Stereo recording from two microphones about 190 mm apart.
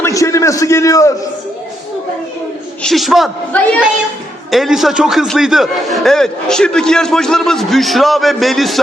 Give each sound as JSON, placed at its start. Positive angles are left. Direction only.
{"t": 0.0, "sound": "a man's voice", "side_deg": 15}
{"t": 2.8, "sound": "a man's voice", "side_deg": 0}